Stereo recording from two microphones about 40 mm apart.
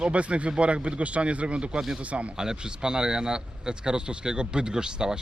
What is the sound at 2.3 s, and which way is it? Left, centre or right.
A man's voice, centre.